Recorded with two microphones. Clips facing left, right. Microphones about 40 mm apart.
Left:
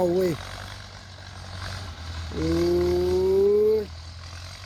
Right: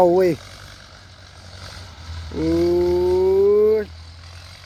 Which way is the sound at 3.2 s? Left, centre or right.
Right.